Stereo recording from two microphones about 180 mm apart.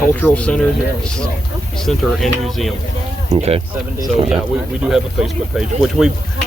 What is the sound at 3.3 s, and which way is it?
Speech, 35° right (ahead or behind).